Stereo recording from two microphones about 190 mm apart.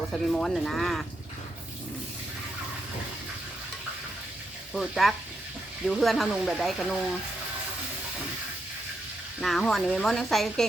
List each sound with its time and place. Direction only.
0.1 s speech: centre (ahead or behind)
4.7 s speech: centre (ahead or behind)
9.4 s speech: centre (ahead or behind)